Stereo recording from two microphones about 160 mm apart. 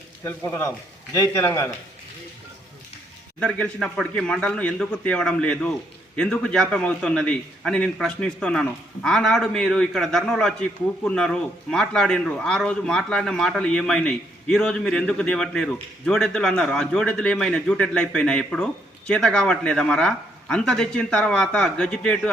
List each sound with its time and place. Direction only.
0.3 s a man's voice: 15° left (ahead or behind)
3.4 s a man's voice: 5° left (ahead or behind)